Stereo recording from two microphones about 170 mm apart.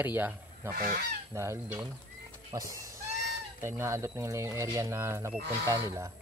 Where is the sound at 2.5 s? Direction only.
20° right (ahead or behind).